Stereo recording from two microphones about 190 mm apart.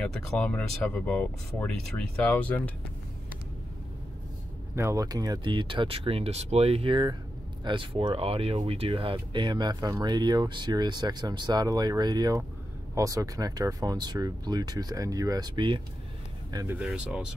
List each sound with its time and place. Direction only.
0.0 s speech: 5° left (ahead or behind)
4.7 s speech: 15° right (ahead or behind)
16.5 s speech: 10° right (ahead or behind)